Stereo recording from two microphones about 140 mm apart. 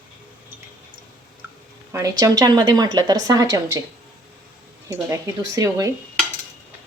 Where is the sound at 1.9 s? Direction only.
25° right (ahead or behind).